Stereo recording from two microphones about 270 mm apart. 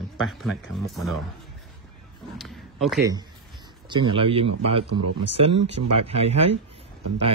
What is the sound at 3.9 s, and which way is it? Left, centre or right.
Speech, centre.